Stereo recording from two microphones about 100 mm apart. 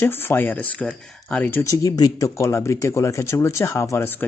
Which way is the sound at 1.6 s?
35° left (ahead or behind).